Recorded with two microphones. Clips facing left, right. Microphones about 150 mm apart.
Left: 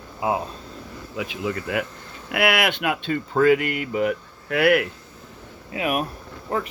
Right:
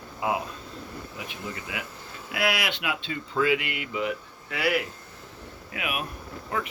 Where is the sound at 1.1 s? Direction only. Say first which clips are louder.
Left 12 dB; 90° left.